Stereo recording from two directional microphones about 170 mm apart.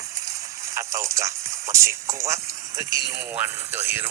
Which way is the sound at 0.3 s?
20° right (ahead or behind).